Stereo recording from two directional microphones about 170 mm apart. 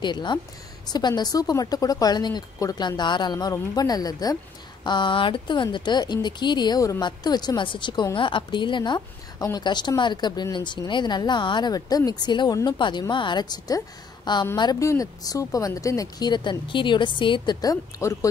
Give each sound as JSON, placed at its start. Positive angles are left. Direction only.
{"t": 0.0, "sound": "speech", "side_deg": 25}